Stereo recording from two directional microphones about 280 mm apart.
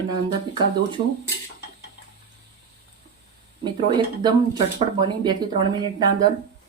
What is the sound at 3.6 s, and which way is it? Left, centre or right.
Speech, centre.